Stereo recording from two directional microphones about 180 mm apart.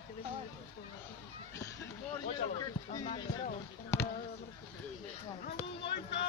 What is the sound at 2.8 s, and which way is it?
Speech, 40° left (ahead or behind).